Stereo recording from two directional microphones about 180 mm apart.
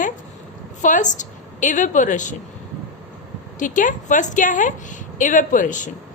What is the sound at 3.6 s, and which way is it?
A woman's voice, 45° left (ahead or behind).